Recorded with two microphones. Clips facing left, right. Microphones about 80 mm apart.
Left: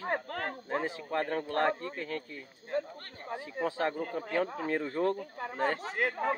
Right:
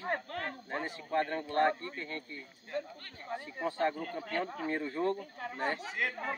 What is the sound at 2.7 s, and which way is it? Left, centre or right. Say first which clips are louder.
Speech: left 5 dB; left.